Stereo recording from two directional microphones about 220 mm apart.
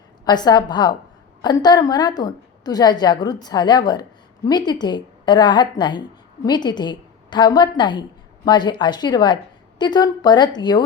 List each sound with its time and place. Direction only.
0.3 s a woman's voice: 20° left (ahead or behind)